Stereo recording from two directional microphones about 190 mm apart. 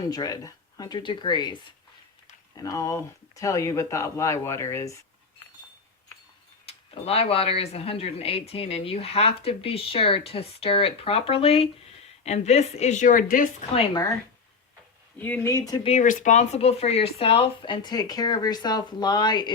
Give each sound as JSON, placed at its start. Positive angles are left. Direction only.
{"t": 0.1, "sound": "speech", "side_deg": 20}
{"t": 6.7, "sound": "speech", "side_deg": 30}
{"t": 13.7, "sound": "speech", "side_deg": 20}
{"t": 15.2, "sound": "speech", "side_deg": 10}
{"t": 15.9, "sound": "speech", "side_deg": 40}